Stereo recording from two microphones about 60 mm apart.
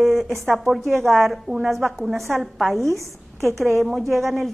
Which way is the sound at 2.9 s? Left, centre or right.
Right.